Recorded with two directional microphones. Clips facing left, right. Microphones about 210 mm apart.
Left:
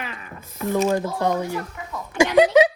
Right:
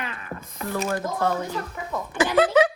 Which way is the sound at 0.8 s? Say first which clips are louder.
Left 1 dB; 15° left (ahead or behind).